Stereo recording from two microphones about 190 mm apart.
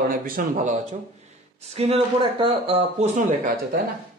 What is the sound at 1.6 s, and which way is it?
Speech, 35° right (ahead or behind).